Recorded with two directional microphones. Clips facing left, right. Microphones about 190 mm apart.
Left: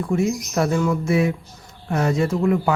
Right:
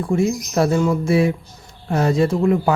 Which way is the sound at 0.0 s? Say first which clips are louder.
Right 2 dB; 30° right (ahead or behind).